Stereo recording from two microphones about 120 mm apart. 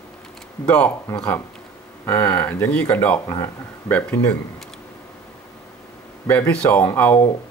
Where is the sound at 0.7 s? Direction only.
10° left (ahead or behind).